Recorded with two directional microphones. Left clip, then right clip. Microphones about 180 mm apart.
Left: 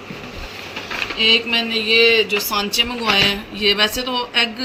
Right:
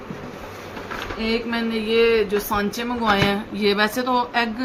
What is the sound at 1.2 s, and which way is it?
Speech, 50° right (ahead or behind).